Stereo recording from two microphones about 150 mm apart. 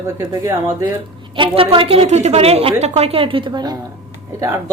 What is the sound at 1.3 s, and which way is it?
A woman's voice, 35° right (ahead or behind).